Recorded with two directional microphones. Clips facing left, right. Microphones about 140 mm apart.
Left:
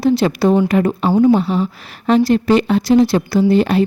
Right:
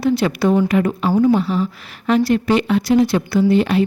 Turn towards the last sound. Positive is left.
turn(degrees=35)  # may be behind; listen again after turning